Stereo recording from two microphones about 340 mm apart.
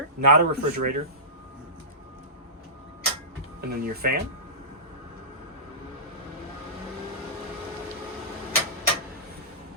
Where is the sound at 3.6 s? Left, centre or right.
Right.